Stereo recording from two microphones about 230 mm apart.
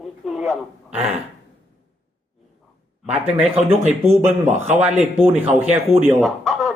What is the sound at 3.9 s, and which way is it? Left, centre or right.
Speech, right.